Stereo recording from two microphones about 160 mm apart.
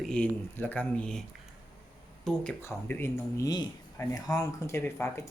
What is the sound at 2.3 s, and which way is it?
Speech, centre (ahead or behind).